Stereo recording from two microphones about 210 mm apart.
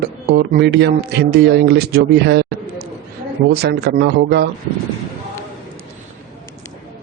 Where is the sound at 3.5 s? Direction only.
50° right (ahead or behind).